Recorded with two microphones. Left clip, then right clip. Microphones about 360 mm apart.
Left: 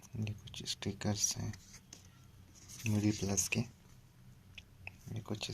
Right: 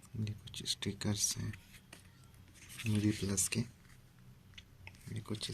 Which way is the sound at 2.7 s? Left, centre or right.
Centre.